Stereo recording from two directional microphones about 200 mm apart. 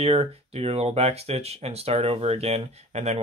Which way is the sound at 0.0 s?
30° right (ahead or behind).